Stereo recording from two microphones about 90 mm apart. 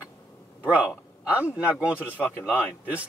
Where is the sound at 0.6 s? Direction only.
15° right (ahead or behind).